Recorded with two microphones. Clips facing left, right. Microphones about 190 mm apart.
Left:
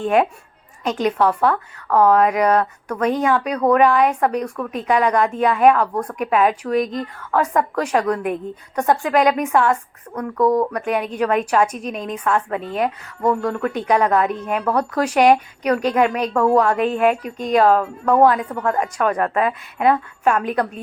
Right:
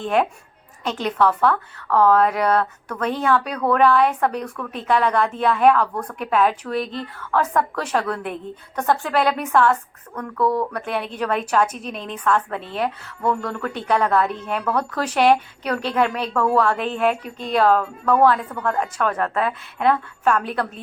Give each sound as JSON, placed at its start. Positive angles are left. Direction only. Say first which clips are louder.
{"t": 0.9, "sound": "a woman's voice", "louder": "left 2 dB", "side_deg": 10}
{"t": 6.8, "sound": "speech", "louder": "left 4 dB", "side_deg": 40}
{"t": 7.3, "sound": "a woman's voice", "louder": "left 2 dB", "side_deg": 10}